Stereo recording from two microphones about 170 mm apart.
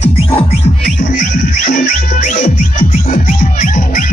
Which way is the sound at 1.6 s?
55° left (ahead or behind).